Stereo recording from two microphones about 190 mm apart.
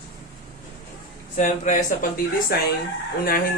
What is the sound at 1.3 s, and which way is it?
Speech, 40° left (ahead or behind).